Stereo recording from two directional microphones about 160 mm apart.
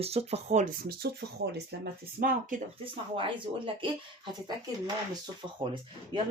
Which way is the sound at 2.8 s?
30° right (ahead or behind).